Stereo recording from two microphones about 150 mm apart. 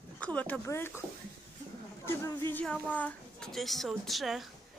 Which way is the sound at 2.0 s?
15° left (ahead or behind).